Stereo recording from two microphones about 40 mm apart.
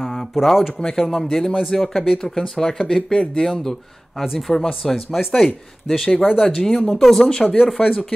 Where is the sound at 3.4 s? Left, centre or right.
Centre.